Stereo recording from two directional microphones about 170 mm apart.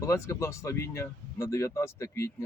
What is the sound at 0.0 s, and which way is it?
Speech, 15° left (ahead or behind).